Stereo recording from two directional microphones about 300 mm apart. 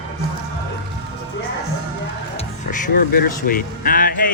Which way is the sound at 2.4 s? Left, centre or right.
Left.